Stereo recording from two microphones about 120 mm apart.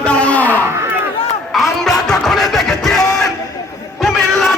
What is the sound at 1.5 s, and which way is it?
Music, centre (ahead or behind).